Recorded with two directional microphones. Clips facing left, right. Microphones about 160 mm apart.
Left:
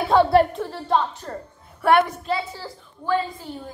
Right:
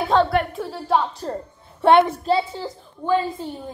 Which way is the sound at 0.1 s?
10° left (ahead or behind).